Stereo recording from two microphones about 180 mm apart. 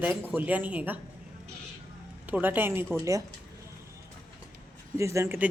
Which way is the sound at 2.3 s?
10° right (ahead or behind).